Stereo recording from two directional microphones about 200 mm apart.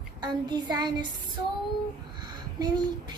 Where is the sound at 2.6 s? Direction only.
20° right (ahead or behind).